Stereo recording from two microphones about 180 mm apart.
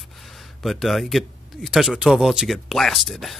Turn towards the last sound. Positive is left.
turn(degrees=0)  # may be behind; listen again after turning